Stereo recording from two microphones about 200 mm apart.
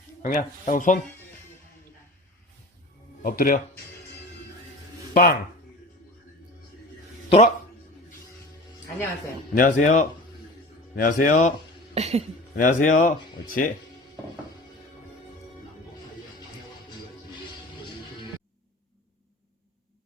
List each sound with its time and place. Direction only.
0.2 s speech: 45° left (ahead or behind)
3.2 s speech: 45° left (ahead or behind)
5.1 s speech: 45° left (ahead or behind)
7.3 s speech: 30° left (ahead or behind)
9.6 s speech: 40° left (ahead or behind)
11.9 s speech: 30° right (ahead or behind)
12.5 s speech: 40° left (ahead or behind)